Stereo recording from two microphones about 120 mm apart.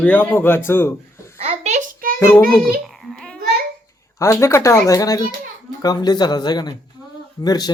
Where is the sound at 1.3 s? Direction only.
65° right (ahead or behind).